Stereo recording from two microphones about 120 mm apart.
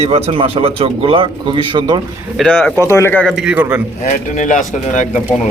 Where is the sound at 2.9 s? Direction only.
20° left (ahead or behind).